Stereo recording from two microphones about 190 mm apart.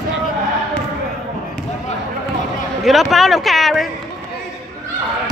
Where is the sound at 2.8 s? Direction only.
Centre (ahead or behind).